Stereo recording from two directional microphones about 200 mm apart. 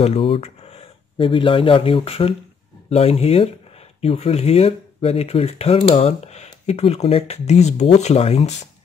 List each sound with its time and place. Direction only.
0.0 s speech: 30° left (ahead or behind)